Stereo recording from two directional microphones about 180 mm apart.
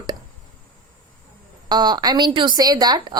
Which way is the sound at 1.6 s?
25° right (ahead or behind).